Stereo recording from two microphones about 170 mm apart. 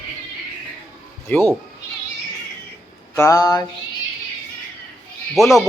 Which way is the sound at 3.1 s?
20° left (ahead or behind).